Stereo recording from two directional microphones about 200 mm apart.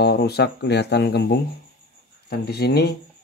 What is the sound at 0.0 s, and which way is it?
Speech, 55° left (ahead or behind).